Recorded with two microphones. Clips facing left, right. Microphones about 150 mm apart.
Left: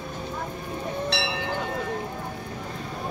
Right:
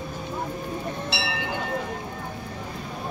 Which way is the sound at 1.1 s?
5° right (ahead or behind).